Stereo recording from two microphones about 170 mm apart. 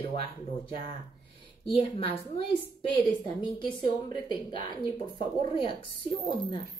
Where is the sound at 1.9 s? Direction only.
35° left (ahead or behind).